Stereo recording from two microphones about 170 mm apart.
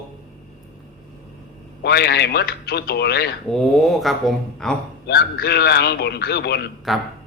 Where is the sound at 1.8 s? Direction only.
75° left (ahead or behind).